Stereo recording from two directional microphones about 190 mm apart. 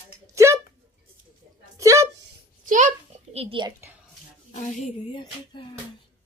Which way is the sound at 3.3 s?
30° right (ahead or behind).